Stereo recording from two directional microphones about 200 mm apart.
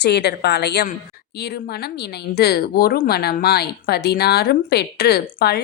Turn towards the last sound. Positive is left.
turn(degrees=50)  # may be behind; listen again after turning